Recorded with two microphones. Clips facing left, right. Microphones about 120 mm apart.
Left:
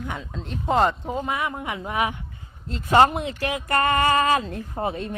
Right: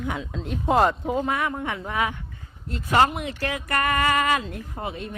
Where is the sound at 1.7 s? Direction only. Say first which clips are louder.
Left 1 dB; 15° left (ahead or behind).